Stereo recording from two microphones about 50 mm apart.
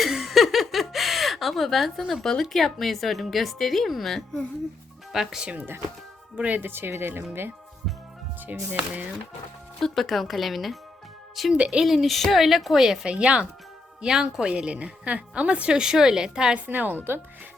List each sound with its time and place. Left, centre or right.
0.0 s chuckle: centre
2.4 s speech: centre
5.1 s a woman's voice: centre
6.3 s speech: right
6.6 s speech: right
8.5 s a woman's voice: right
9.8 s speech: centre
11.5 s speech: right
11.9 s speech: centre
13.1 s a woman's voice: right
16.6 s a woman's voice: right